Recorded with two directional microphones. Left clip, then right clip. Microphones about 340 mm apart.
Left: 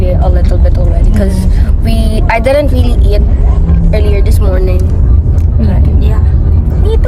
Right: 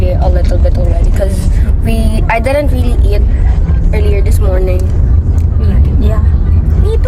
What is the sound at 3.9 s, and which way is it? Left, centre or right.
Speech, centre.